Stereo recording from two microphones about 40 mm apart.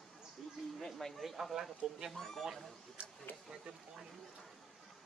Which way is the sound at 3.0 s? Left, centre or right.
Right.